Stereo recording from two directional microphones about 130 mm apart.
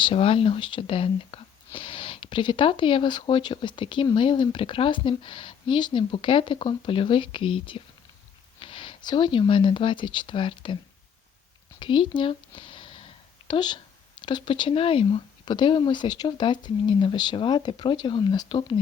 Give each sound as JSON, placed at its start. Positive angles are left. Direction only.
{"t": 0.0, "sound": "speech", "side_deg": 45}
{"t": 11.8, "sound": "a sound", "side_deg": 40}
{"t": 13.5, "sound": "speech", "side_deg": 35}